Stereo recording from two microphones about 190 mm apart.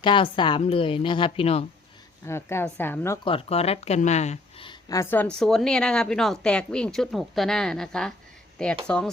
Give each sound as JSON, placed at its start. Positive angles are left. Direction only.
{"t": 0.0, "sound": "a woman's voice", "side_deg": 25}
{"t": 2.2, "sound": "a woman's voice", "side_deg": 15}
{"t": 3.2, "sound": "speech", "side_deg": 30}